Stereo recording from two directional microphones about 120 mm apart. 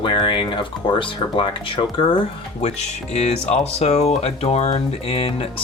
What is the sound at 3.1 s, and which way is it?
Speech, 60° left (ahead or behind).